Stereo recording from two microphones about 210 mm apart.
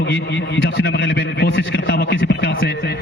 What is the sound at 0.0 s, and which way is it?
A man's voice, 55° left (ahead or behind).